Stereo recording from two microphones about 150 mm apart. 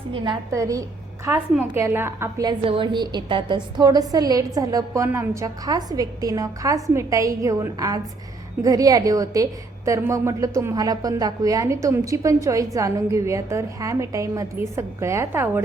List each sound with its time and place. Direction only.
0.5 s a woman's voice: 20° right (ahead or behind)
2.5 s a woman's voice: 35° right (ahead or behind); by 15.6 s 15° right (ahead or behind)